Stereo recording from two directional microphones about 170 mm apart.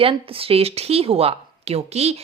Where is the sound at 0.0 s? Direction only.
35° right (ahead or behind).